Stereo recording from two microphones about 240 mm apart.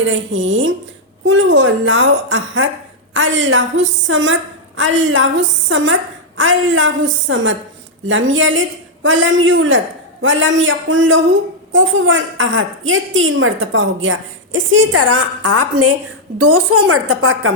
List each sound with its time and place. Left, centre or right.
0.0 s a woman's voice: right
15.0 s a woman's voice: right